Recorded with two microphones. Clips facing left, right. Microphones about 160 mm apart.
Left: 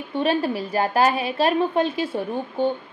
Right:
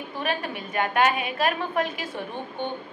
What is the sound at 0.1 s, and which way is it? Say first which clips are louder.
A woman's voice: left 9 dB; 30° left (ahead or behind).